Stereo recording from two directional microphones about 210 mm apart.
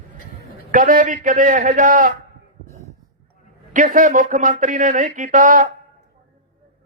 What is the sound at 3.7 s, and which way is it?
A man's voice, 40° right (ahead or behind).